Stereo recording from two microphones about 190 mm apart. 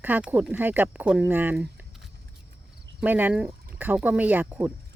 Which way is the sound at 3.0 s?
10° right (ahead or behind).